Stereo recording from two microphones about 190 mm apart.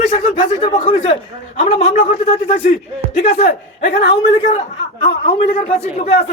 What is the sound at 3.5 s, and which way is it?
A man's voice, 55° left (ahead or behind).